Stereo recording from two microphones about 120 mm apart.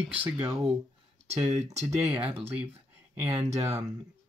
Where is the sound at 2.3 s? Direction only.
15° right (ahead or behind).